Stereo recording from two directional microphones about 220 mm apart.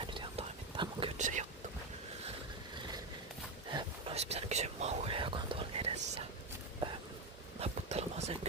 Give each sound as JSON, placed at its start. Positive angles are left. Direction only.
{"t": 0.0, "sound": "whispering", "side_deg": -20}
{"t": 3.7, "sound": "whispering", "side_deg": -30}
{"t": 7.6, "sound": "a sound", "side_deg": -30}